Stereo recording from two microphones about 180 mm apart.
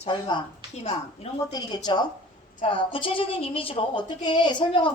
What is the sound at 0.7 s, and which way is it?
Speech, 35° left (ahead or behind).